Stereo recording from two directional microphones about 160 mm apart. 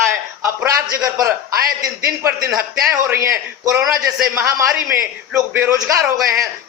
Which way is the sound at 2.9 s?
20° right (ahead or behind).